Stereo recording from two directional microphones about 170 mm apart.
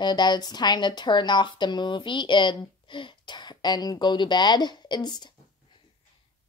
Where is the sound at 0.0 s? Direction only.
25° left (ahead or behind).